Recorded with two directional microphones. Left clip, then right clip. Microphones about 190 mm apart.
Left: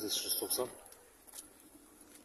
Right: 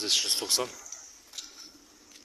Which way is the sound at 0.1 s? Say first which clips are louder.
Right 12 dB; 10° left (ahead or behind).